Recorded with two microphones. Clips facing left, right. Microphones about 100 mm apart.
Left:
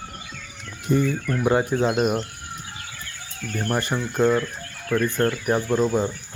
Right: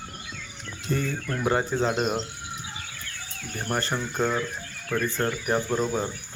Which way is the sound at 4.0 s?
5° left (ahead or behind).